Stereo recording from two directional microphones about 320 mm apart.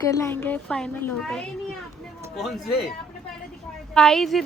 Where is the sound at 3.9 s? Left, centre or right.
Centre.